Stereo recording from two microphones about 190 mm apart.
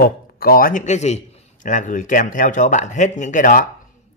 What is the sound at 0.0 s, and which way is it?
Speech, 50° left (ahead or behind).